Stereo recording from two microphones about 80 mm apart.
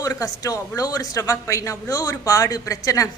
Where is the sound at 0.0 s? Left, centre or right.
Left.